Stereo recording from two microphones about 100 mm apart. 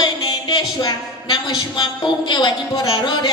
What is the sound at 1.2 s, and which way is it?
A woman's voice, 50° left (ahead or behind).